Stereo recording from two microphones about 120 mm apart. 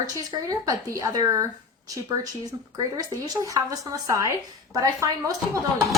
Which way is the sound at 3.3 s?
30° right (ahead or behind).